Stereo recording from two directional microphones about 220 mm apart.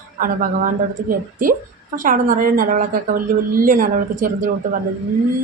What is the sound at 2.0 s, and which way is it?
A woman's voice, 40° right (ahead or behind).